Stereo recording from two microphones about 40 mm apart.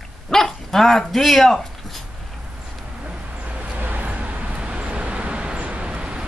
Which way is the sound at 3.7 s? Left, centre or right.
Right.